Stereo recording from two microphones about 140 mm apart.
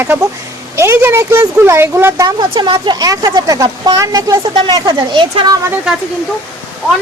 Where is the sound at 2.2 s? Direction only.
30° right (ahead or behind).